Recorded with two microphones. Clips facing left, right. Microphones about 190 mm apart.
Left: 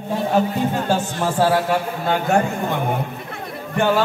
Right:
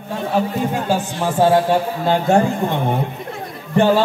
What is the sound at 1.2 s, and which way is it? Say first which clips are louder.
A man's voice: right 5 dB; 25° right (ahead or behind).